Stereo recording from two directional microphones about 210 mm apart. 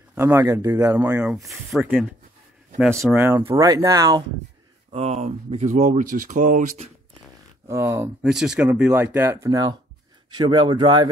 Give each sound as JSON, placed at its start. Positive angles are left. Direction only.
{"t": 0.1, "sound": "speech", "side_deg": -10}
{"t": 3.1, "sound": "speech", "side_deg": -10}
{"t": 4.9, "sound": "speech", "side_deg": -30}
{"t": 7.6, "sound": "speech", "side_deg": -10}